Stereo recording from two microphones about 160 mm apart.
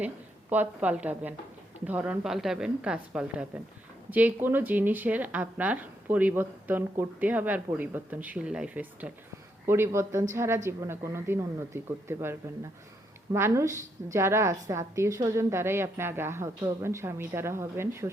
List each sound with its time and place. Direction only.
0.5 s speech: 10° right (ahead or behind)